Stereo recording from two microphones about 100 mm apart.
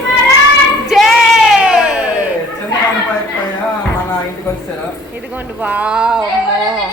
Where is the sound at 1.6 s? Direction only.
10° right (ahead or behind).